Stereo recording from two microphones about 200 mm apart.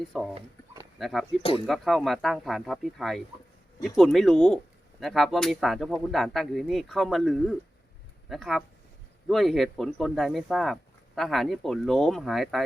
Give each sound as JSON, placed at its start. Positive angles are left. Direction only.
{"t": 0.1, "sound": "speech", "side_deg": 0}
{"t": 1.4, "sound": "speech", "side_deg": 30}
{"t": 1.6, "sound": "speech", "side_deg": 0}